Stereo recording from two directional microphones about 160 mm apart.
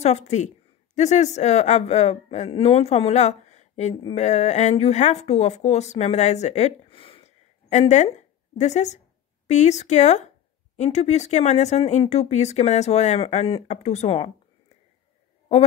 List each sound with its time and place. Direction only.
0.0 s speech: 45° left (ahead or behind)